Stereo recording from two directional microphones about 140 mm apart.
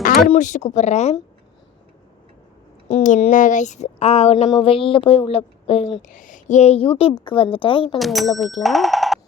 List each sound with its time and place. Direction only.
0.0 s speech: 80° left; by 1.1 s 55° left (ahead or behind)
2.9 s a woman's voice: 55° left (ahead or behind)
6.1 s a woman's voice: 65° left (ahead or behind); by 7.9 s 35° left (ahead or behind)
7.9 s speech: centre (ahead or behind)